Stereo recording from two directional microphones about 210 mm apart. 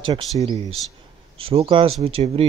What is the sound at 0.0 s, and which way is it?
Speech, 25° right (ahead or behind).